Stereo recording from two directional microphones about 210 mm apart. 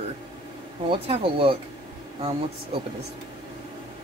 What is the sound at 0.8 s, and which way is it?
Speech, 25° right (ahead or behind).